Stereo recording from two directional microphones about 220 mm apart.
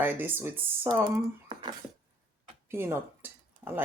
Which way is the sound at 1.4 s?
20° right (ahead or behind).